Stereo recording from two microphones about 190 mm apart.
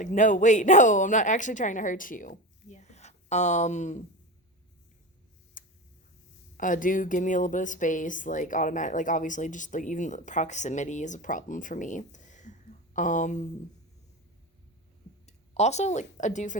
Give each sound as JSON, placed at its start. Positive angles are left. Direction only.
{"t": 0.0, "sound": "speech", "side_deg": 40}
{"t": 5.6, "sound": "tick", "side_deg": 45}
{"t": 6.6, "sound": "a woman's voice", "side_deg": 45}
{"t": 15.3, "sound": "a woman's voice", "side_deg": 35}